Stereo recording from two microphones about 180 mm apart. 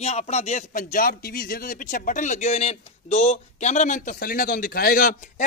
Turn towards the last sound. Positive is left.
turn(degrees=45)  # may be behind; listen again after turning